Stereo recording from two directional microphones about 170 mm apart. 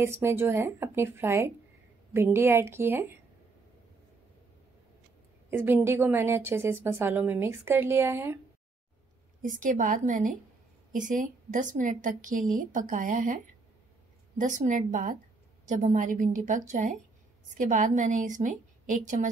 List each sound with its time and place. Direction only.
0.0 s a woman's voice: 15° right (ahead or behind)
5.5 s a woman's voice: 15° right (ahead or behind)
9.4 s a woman's voice: 50° right (ahead or behind)
14.4 s a woman's voice: 45° right (ahead or behind)